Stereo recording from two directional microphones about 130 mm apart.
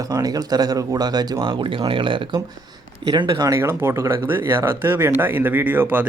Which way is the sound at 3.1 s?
30° right (ahead or behind).